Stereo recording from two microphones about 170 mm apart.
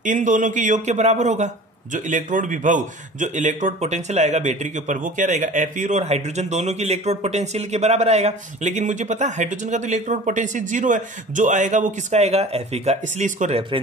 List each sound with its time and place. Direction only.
0.0 s a man's voice: 50° right (ahead or behind)